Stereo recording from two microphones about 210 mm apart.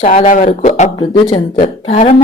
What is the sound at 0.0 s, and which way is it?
Speech, 35° left (ahead or behind).